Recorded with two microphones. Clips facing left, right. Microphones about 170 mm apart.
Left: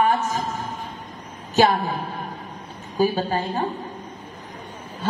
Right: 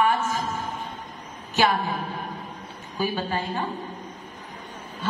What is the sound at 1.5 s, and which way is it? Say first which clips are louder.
Speech: left 4 dB; 35° left (ahead or behind).